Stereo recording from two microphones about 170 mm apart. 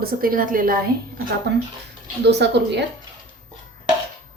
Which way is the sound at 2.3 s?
85° right.